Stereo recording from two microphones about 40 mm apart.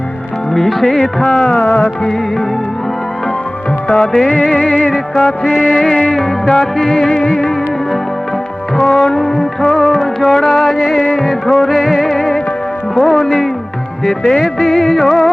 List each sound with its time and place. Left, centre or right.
0.5 s music: centre
1.2 s music: left
1.5 s music: left
3.8 s music: centre
4.1 s music: centre
6.1 s music: centre
8.7 s music: centre